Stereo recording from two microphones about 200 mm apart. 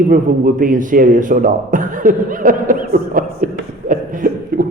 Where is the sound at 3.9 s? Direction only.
40° right (ahead or behind).